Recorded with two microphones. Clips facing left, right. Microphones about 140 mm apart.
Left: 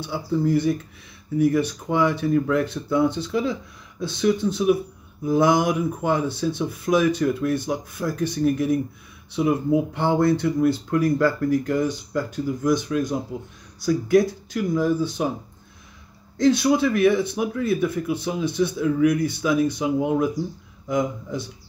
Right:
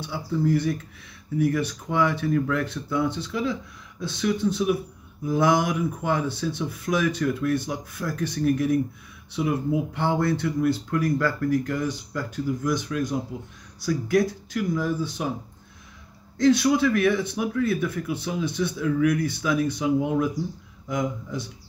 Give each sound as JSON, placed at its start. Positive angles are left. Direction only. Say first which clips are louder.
{"t": 0.1, "sound": "speech", "louder": "left 2 dB", "side_deg": 20}
{"t": 16.3, "sound": "speech", "louder": "left 1 dB", "side_deg": 25}